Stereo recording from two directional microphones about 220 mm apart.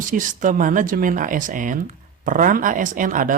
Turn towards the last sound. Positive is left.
turn(degrees=-35)  # may be behind; listen again after turning